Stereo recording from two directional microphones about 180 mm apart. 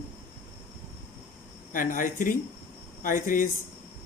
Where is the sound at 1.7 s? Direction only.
50° left (ahead or behind).